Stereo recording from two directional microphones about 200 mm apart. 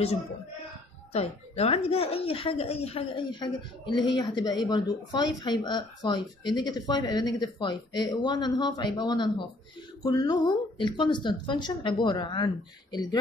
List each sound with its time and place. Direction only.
1.1 s a woman's voice: 30° left (ahead or behind)